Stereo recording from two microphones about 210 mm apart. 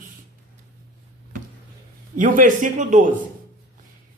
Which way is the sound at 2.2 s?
40° right (ahead or behind).